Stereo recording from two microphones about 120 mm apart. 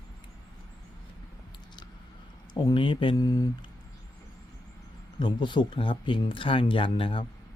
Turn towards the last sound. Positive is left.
turn(degrees=45)  # may be behind; listen again after turning